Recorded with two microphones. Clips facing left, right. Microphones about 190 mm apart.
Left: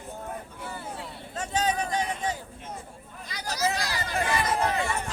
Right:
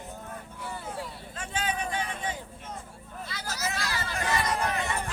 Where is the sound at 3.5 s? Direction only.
35° left (ahead or behind).